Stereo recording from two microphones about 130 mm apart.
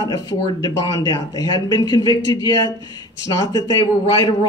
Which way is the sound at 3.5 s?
35° left (ahead or behind).